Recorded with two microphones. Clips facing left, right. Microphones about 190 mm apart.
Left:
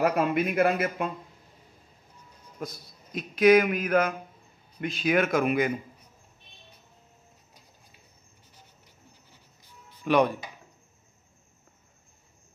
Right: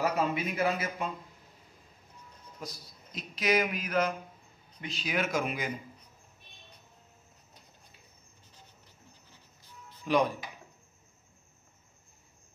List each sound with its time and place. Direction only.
0.0 s a man's voice: 60° left (ahead or behind)
2.6 s a man's voice: 55° left (ahead or behind)
10.0 s speech: 65° left (ahead or behind)